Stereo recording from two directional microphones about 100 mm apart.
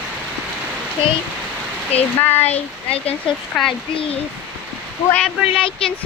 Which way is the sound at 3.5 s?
Centre (ahead or behind).